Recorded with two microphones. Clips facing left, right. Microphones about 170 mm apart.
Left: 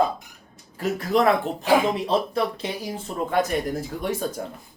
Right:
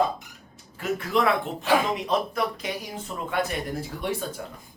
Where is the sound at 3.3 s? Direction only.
40° left (ahead or behind).